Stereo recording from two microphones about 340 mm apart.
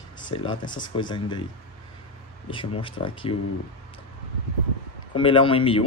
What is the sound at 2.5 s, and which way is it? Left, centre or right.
Speech, centre.